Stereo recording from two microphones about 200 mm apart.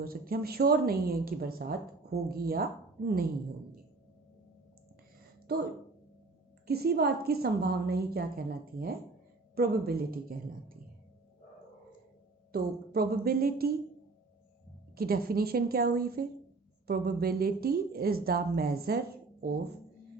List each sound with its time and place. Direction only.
0.0 s a woman's voice: 45° right (ahead or behind)
5.5 s a woman's voice: 50° right (ahead or behind)
6.7 s a woman's voice: 50° right (ahead or behind)
12.5 s a woman's voice: 50° right (ahead or behind)
14.9 s a woman's voice: 50° right (ahead or behind)